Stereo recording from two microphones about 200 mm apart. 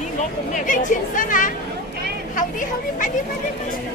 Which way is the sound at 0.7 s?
40° left (ahead or behind).